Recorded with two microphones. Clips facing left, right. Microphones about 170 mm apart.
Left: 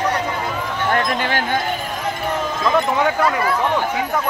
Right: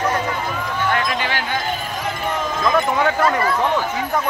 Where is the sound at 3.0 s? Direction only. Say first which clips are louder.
Even; 10° left (ahead or behind).